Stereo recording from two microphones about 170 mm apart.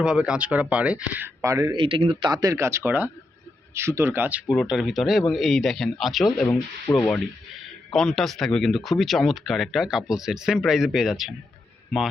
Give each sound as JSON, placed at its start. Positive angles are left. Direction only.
{"t": 0.0, "sound": "speech", "side_deg": -5}
{"t": 1.8, "sound": "speech", "side_deg": -35}
{"t": 2.3, "sound": "speech", "side_deg": -20}